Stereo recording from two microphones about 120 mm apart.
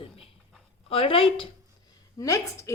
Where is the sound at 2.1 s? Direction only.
25° left (ahead or behind).